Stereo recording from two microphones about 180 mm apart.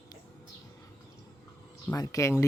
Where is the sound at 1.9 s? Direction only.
20° left (ahead or behind).